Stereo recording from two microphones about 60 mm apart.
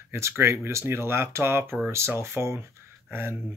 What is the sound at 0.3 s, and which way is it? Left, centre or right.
Speech, right.